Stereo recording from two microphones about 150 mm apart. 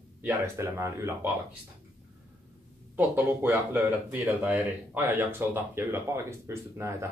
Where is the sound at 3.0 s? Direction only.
10° right (ahead or behind).